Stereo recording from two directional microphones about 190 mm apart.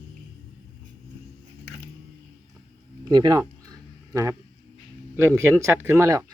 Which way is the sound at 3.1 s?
20° right (ahead or behind).